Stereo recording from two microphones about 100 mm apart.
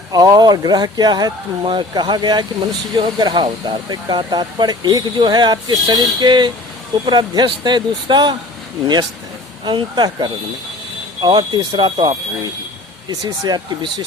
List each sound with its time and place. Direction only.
0.1 s speech: 40° right (ahead or behind)
9.6 s speech: 45° right (ahead or behind)